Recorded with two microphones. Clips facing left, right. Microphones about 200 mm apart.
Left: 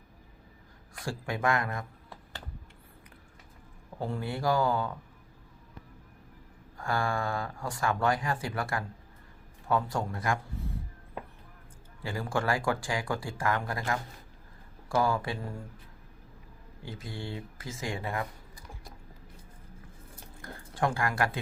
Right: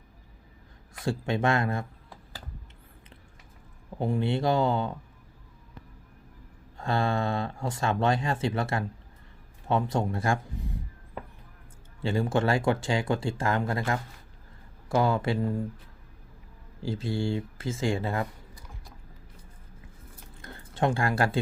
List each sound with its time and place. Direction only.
1.0 s speech: 25° right (ahead or behind)
3.9 s speech: 15° right (ahead or behind)
6.7 s speech: 25° right (ahead or behind)
12.0 s speech: 25° right (ahead or behind)
16.8 s speech: 30° right (ahead or behind)
20.4 s speech: 25° right (ahead or behind)